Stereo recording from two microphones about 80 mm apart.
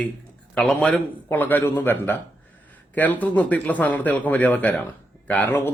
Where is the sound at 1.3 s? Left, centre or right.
Left.